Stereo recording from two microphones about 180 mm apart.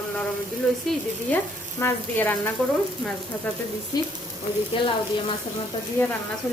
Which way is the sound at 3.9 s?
20° left (ahead or behind).